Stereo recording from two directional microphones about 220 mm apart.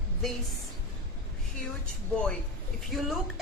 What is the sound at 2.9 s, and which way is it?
Speech, centre (ahead or behind).